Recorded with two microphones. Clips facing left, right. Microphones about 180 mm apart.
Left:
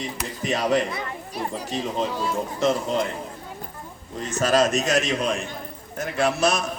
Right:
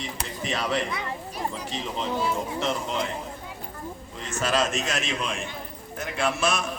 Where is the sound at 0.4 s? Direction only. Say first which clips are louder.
Left 5 dB; 40° left (ahead or behind).